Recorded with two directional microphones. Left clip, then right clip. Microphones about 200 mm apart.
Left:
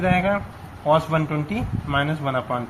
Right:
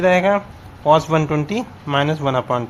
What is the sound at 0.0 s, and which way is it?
A man's voice, 45° right (ahead or behind).